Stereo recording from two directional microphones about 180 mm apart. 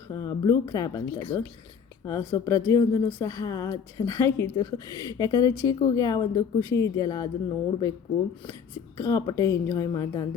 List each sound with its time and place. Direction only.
0.1 s speech: 20° left (ahead or behind)
9.0 s speech: 15° left (ahead or behind)